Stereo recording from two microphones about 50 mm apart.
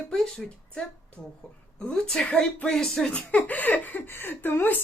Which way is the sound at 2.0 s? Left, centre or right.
Centre.